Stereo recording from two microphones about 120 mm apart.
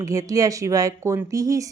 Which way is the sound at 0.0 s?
30° right (ahead or behind).